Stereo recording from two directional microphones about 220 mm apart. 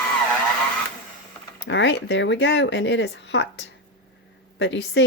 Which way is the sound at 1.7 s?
55° left (ahead or behind).